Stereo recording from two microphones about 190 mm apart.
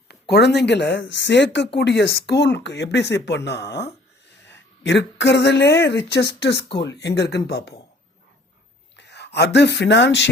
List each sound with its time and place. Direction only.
0.1 s speech: 60° left (ahead or behind)
9.0 s speech: 65° left (ahead or behind)